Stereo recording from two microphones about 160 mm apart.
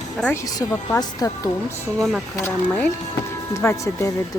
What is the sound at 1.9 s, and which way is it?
Speech, centre (ahead or behind).